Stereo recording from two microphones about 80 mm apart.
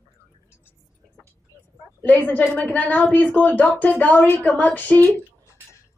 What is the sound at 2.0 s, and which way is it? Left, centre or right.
A woman's voice, left.